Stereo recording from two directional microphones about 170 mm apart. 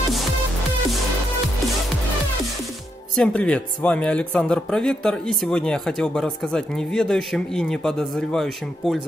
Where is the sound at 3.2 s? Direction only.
5° left (ahead or behind).